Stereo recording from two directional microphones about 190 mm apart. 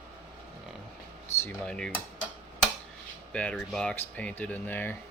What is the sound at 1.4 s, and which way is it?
Dishes, 10° left (ahead or behind).